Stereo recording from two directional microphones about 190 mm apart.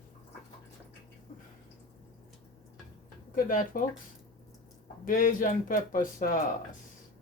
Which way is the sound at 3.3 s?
45° left (ahead or behind).